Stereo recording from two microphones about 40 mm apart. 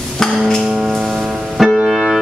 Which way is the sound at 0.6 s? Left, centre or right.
Centre.